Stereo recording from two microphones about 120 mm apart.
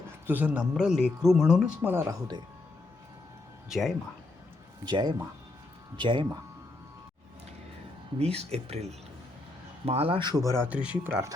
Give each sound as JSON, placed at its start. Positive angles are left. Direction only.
{"t": 0.3, "sound": "speech", "side_deg": -15}
{"t": 1.8, "sound": "speech", "side_deg": -20}
{"t": 3.7, "sound": "speech", "side_deg": 0}
{"t": 4.9, "sound": "speech", "side_deg": -35}
{"t": 8.2, "sound": "speech", "side_deg": -60}
{"t": 10.2, "sound": "speech", "side_deg": -35}